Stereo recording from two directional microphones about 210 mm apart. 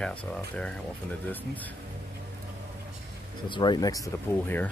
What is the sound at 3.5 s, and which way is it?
Speech, 20° left (ahead or behind).